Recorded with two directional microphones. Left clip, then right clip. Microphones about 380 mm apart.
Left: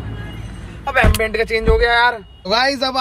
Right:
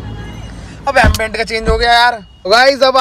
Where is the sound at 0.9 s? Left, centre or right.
Centre.